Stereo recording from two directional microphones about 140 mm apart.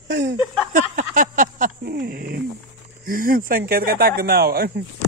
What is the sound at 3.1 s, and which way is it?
Speech, 90° right.